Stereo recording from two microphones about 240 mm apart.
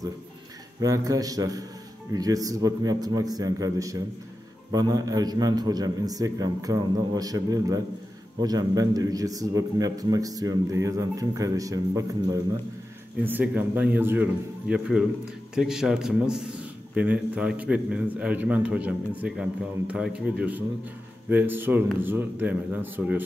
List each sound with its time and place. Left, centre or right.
0.7 s a man's voice: centre